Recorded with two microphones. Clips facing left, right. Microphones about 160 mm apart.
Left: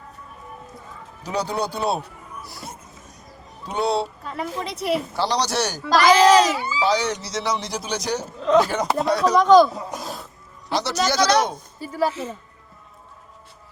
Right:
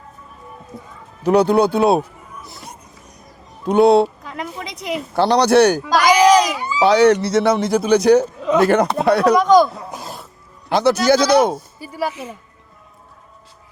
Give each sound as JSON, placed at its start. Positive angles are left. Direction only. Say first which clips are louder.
{"t": 1.2, "sound": "speech", "louder": "right 12 dB", "side_deg": -60}
{"t": 2.4, "sound": "music", "louder": "even", "side_deg": -20}
{"t": 3.7, "sound": "speech", "louder": "right 11 dB", "side_deg": -55}
{"t": 4.6, "sound": "speech", "louder": "left 4 dB", "side_deg": -15}
{"t": 5.1, "sound": "speech", "louder": "right 10 dB", "side_deg": -60}
{"t": 5.8, "sound": "a child's voice", "louder": "right 2 dB", "side_deg": -15}
{"t": 6.8, "sound": "speech", "louder": "right 11 dB", "side_deg": -60}
{"t": 9.3, "sound": "speech", "louder": "left 1 dB", "side_deg": -15}
{"t": 10.7, "sound": "speech", "louder": "right 9 dB", "side_deg": -55}
{"t": 11.5, "sound": "speech", "louder": "right 2 dB", "side_deg": -10}